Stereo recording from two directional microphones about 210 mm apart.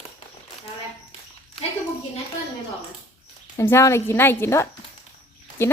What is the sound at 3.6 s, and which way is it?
Speech, 15° left (ahead or behind).